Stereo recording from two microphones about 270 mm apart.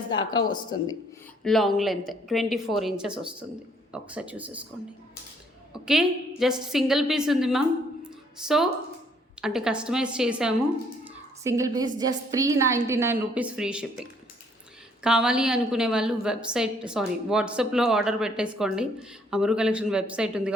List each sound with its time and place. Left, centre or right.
0.1 s speech: centre
1.5 s a woman's voice: centre
5.7 s a woman's voice: centre
8.0 s a sound: centre
9.4 s a woman's voice: centre